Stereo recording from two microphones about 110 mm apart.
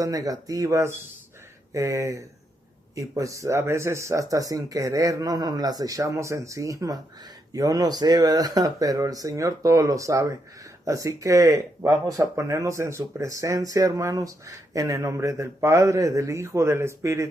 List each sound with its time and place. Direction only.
0.0 s speech: 35° right (ahead or behind)